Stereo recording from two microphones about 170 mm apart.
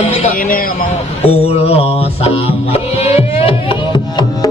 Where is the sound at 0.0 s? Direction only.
35° left (ahead or behind).